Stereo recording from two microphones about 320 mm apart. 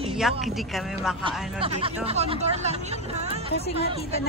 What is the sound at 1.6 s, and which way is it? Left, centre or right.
Speech, centre.